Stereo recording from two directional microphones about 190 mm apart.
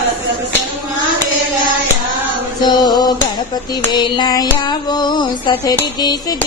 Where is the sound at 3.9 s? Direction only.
20° left (ahead or behind).